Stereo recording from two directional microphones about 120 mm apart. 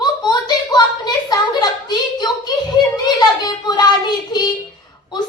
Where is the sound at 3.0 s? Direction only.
35° left (ahead or behind).